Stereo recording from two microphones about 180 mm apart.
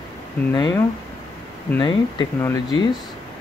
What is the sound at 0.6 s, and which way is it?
Speech, 20° left (ahead or behind).